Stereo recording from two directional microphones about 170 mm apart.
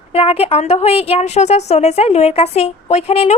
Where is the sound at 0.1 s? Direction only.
35° left (ahead or behind).